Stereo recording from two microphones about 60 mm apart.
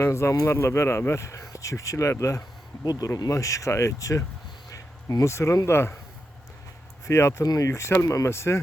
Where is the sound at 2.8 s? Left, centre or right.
Left.